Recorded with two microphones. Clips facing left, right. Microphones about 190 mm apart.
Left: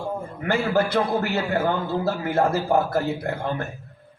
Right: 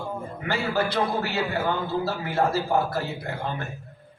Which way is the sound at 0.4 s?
50° left (ahead or behind).